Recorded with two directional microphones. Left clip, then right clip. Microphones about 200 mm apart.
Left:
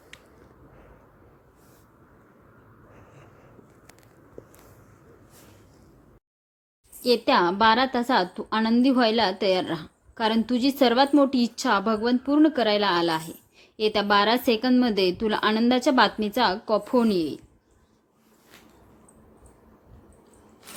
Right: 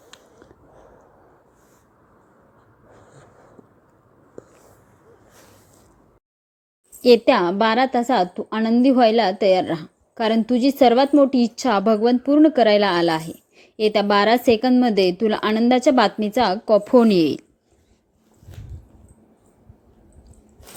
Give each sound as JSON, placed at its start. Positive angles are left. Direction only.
{"t": 7.0, "sound": "a woman's voice", "side_deg": -30}
{"t": 7.3, "sound": "a woman's voice", "side_deg": -15}